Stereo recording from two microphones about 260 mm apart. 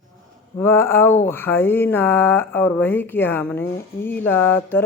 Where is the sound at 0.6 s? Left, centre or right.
Centre.